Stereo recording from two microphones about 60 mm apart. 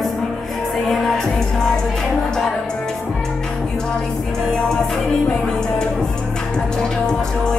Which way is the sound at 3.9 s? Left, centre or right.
Centre.